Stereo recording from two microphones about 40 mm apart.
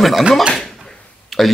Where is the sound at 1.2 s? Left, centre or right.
Centre.